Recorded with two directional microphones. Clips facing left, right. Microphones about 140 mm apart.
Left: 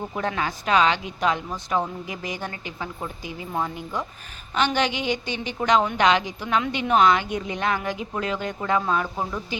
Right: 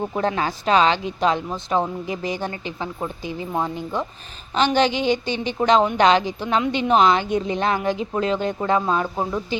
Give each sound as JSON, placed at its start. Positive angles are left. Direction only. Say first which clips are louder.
{"t": 0.1, "sound": "speech", "louder": "right 4 dB", "side_deg": -30}